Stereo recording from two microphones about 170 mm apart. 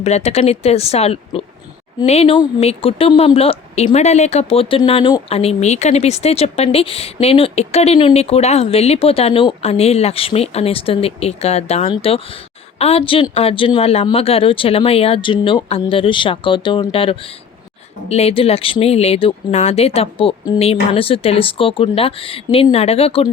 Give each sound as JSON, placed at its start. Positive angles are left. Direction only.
{"t": 0.0, "sound": "speech", "side_deg": 40}